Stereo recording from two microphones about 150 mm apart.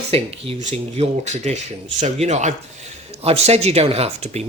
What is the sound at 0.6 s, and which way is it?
Speech, 50° right (ahead or behind).